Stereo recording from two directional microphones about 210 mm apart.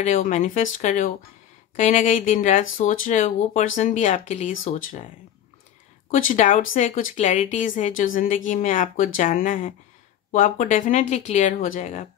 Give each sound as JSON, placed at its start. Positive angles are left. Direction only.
{"t": 0.0, "sound": "a woman's voice", "side_deg": 35}
{"t": 6.1, "sound": "a woman's voice", "side_deg": 35}